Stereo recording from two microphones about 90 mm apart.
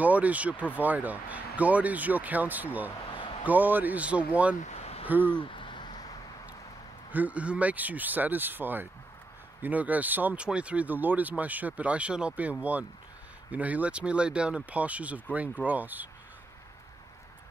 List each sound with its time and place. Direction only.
0.0 s speech: 15° right (ahead or behind)
5.3 s a sound: 70° left (ahead or behind); by 6.1 s 55° left (ahead or behind)
7.1 s speech: 15° right (ahead or behind)